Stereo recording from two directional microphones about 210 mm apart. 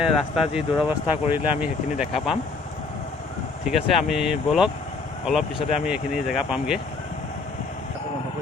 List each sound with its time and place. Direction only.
0.0 s speech: centre (ahead or behind)
3.7 s speech: centre (ahead or behind)